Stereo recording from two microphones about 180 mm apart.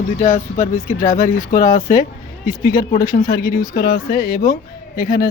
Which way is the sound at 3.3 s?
60° left (ahead or behind).